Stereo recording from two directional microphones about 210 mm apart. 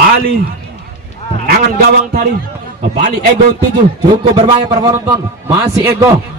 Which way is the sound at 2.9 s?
40° right (ahead or behind).